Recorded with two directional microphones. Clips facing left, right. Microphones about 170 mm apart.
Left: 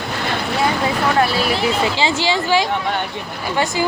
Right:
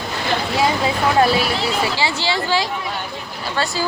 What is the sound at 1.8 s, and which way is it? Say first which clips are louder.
Speech: left 3 dB; 20° left (ahead or behind).